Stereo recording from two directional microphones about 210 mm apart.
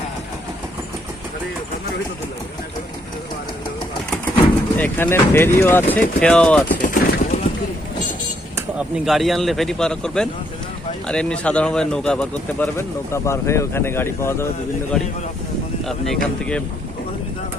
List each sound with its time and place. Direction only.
4.8 s a man's voice: 10° left (ahead or behind)
6.7 s a sound: 40° left (ahead or behind)
9.0 s a man's voice: centre (ahead or behind)
15.8 s a man's voice: centre (ahead or behind)